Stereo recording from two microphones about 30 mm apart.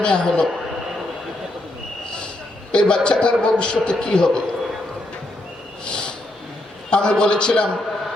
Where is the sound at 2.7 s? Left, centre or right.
Left.